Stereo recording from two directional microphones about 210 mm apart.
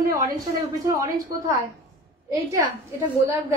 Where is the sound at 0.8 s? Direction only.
15° right (ahead or behind).